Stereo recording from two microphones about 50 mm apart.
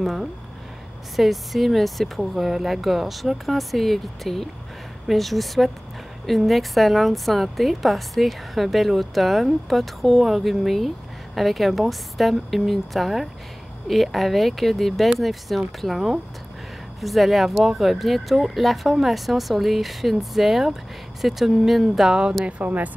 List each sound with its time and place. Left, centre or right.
0.0 s a woman's voice: centre
22.4 s speech: right